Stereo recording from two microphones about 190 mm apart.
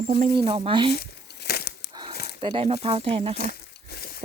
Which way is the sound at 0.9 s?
55° left (ahead or behind).